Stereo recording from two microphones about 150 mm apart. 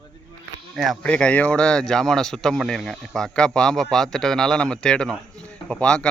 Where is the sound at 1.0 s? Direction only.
10° left (ahead or behind).